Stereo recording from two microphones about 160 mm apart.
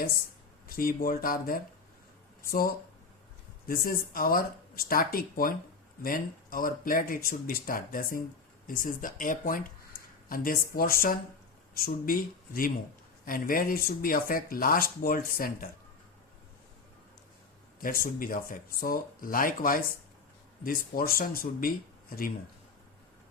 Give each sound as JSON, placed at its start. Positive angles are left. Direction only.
{"t": 0.7, "sound": "speech", "side_deg": 60}
{"t": 17.8, "sound": "speech", "side_deg": 60}